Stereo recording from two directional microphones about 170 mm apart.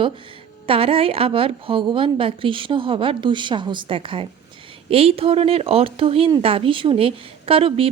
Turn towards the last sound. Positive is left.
turn(degrees=-35)  # may be behind; listen again after turning